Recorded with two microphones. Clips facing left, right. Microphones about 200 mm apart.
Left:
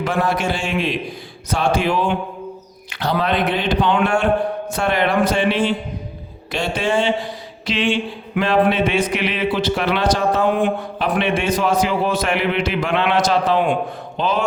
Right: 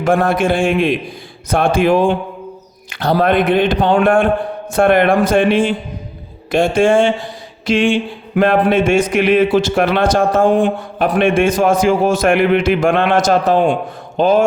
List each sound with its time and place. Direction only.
0.0 s a man's voice: 50° right (ahead or behind)